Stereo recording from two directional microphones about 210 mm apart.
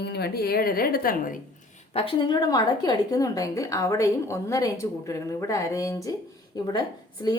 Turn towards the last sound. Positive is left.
turn(degrees=20)  # may be behind; listen again after turning